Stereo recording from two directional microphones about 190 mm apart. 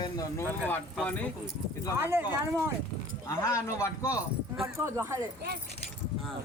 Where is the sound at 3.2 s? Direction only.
15° left (ahead or behind).